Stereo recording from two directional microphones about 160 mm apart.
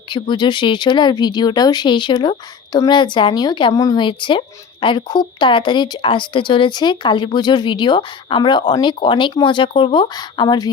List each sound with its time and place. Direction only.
0.1 s a woman's voice: 30° left (ahead or behind)